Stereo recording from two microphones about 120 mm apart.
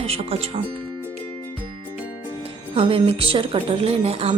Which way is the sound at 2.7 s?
50° right (ahead or behind).